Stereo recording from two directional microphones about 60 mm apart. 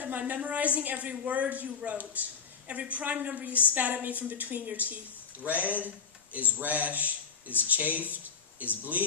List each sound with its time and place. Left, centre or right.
0.0 s a woman's voice: right